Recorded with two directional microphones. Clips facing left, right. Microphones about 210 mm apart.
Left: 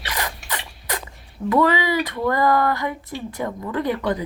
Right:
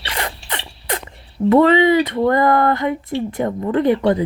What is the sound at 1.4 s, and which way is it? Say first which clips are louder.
Speech: right 7 dB; 25° right (ahead or behind).